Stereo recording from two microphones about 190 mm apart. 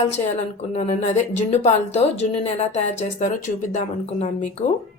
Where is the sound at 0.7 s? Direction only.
35° left (ahead or behind).